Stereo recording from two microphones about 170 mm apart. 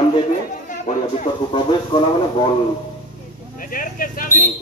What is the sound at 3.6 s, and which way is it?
Speech, 55° left (ahead or behind).